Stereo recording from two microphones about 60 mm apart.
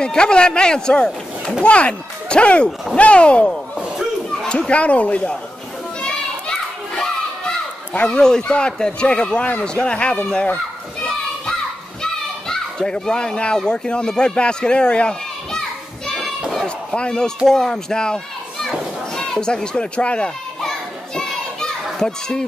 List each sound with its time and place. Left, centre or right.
0.0 s speech: centre
4.3 s children playing: centre
4.6 s speech: centre
5.9 s children playing: centre
7.9 s speech: left
12.0 s a child's voice: centre
16.6 s a sound: centre
17.5 s a child's voice: centre
20.6 s children playing: centre
21.9 s a child's voice: centre